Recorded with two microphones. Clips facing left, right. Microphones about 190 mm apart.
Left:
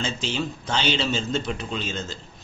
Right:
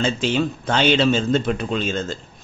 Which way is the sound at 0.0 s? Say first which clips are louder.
Right 7 dB; 55° right (ahead or behind).